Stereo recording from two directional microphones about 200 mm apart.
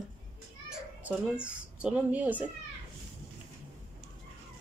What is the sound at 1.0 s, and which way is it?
A woman's voice, 5° right (ahead or behind).